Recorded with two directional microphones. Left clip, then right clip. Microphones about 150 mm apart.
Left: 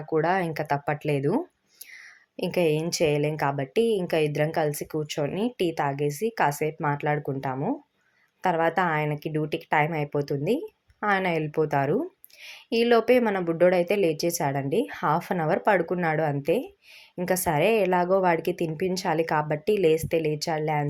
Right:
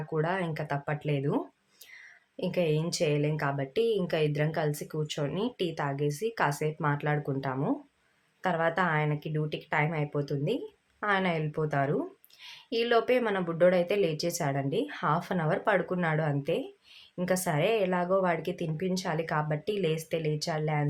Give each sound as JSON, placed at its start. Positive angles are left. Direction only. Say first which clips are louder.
{"t": 0.1, "sound": "a woman's voice", "louder": "left 7 dB", "side_deg": 40}
{"t": 2.3, "sound": "a woman's voice", "louder": "left 5 dB", "side_deg": 35}